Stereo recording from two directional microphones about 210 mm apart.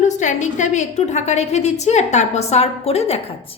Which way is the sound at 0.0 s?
35° left (ahead or behind).